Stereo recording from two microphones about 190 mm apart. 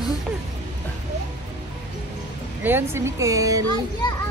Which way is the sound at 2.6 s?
10° right (ahead or behind).